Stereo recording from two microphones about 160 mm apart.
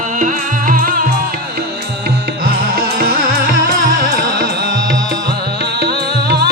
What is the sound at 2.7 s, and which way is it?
Music, 70° right (ahead or behind).